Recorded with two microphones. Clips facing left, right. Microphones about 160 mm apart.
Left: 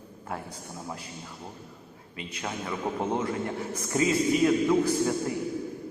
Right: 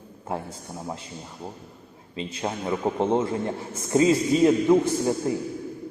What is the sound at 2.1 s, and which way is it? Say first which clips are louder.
A man's voice: right 6 dB; 30° right (ahead or behind).